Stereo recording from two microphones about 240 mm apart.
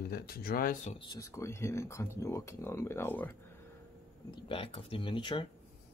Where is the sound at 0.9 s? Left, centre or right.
Centre.